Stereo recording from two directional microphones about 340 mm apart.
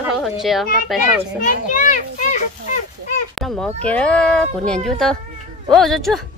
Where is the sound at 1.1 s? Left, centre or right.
Left.